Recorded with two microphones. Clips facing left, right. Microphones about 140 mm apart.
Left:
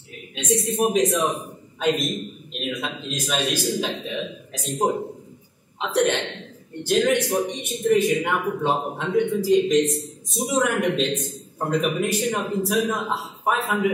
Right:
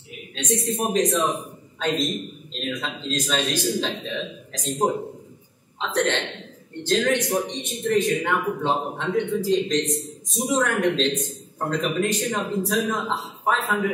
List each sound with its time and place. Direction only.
0.3 s a man's voice: 15° left (ahead or behind)